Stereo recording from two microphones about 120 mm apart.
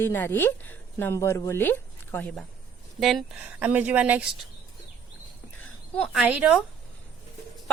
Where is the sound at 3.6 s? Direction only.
10° right (ahead or behind).